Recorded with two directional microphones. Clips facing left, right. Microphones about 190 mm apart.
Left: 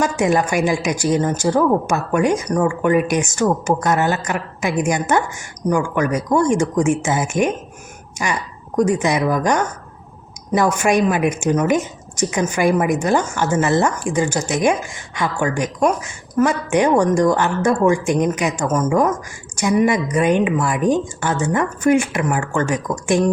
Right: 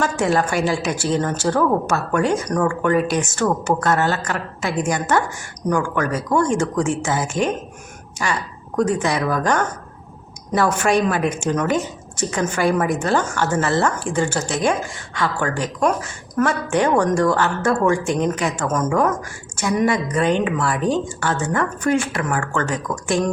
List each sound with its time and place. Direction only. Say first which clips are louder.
0.0 s a woman's voice: left 2 dB; 15° left (ahead or behind)